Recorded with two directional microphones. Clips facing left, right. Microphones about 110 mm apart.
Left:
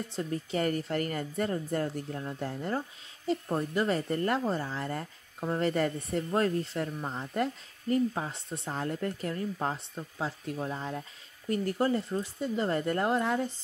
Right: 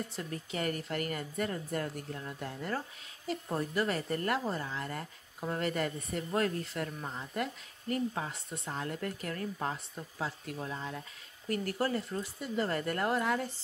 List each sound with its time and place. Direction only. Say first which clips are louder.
0.1 s a woman's voice: left 6 dB; 25° left (ahead or behind)